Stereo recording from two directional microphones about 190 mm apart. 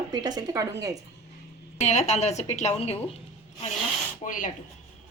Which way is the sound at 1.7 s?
35° left (ahead or behind).